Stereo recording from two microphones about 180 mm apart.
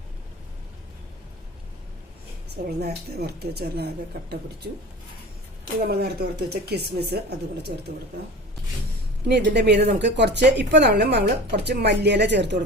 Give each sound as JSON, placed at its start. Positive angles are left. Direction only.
{"t": 2.6, "sound": "speech", "side_deg": -65}
{"t": 5.9, "sound": "speech", "side_deg": -65}
{"t": 9.3, "sound": "speech", "side_deg": -70}